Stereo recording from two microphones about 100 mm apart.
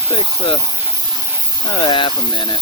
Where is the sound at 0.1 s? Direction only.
55° left (ahead or behind).